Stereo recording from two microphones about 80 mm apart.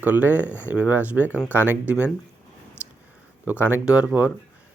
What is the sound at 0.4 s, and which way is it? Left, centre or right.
Speech, left.